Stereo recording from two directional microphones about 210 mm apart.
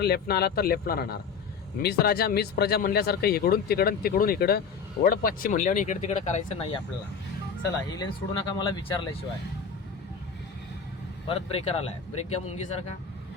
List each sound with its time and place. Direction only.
0.0 s speech: 50° left (ahead or behind); by 6.7 s 30° left (ahead or behind)
7.9 s speech: 20° left (ahead or behind)
11.3 s speech: 25° left (ahead or behind)